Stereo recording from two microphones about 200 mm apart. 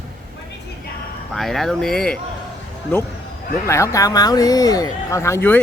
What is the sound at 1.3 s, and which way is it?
Speech, centre (ahead or behind).